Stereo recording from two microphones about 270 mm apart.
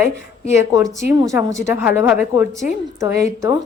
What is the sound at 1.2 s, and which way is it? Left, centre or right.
A woman's voice, centre.